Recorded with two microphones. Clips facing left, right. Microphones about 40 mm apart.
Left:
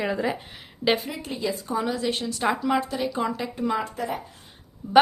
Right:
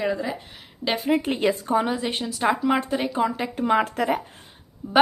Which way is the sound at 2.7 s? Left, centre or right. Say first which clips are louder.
Right 2 dB; right.